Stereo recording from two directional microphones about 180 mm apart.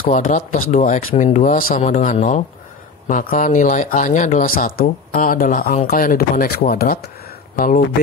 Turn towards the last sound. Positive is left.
turn(degrees=50)  # may be behind; listen again after turning